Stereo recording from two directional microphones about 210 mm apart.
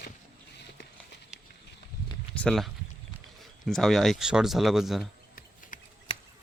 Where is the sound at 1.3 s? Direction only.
5° right (ahead or behind).